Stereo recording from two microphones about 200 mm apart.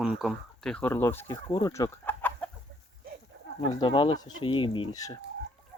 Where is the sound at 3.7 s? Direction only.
25° left (ahead or behind).